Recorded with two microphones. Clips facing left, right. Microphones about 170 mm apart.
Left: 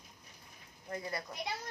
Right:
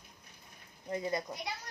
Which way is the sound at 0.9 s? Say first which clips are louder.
Right 5 dB; 20° right (ahead or behind).